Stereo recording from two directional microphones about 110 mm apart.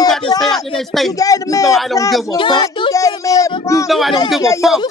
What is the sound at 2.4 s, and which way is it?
Speech, 45° left (ahead or behind).